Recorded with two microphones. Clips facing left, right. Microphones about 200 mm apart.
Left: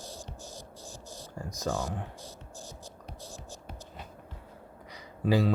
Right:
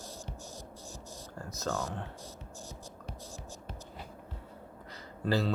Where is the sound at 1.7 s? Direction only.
Centre (ahead or behind).